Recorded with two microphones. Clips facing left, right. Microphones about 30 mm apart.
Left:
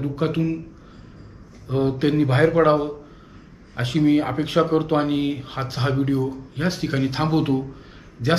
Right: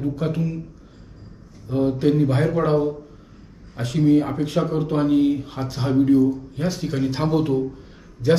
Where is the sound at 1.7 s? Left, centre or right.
Left.